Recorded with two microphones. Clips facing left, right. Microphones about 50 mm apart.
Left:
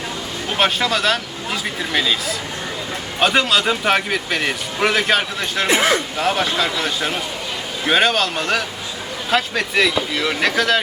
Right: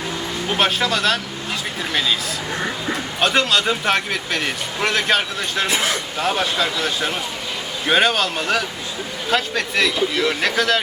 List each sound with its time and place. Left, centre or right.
0.5 s speech: centre
3.2 s speech: centre
5.6 s speech: left
5.9 s speech: centre